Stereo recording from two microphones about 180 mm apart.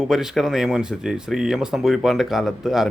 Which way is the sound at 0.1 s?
5° right (ahead or behind).